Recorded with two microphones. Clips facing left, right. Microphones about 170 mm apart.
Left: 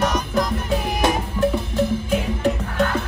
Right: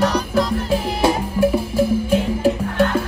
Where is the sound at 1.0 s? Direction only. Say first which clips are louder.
Right 4 dB; 10° right (ahead or behind).